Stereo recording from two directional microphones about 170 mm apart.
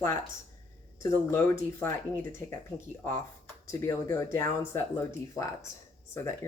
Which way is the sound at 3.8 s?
15° left (ahead or behind).